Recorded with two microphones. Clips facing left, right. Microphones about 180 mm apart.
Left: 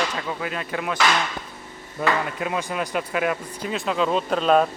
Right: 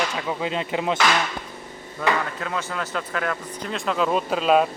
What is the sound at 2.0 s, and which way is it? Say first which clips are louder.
Speech: left 1 dB; 20° left (ahead or behind).